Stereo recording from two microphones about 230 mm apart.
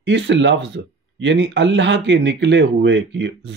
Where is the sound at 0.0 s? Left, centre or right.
Right.